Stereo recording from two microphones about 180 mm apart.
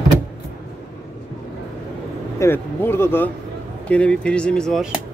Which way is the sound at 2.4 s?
15° left (ahead or behind).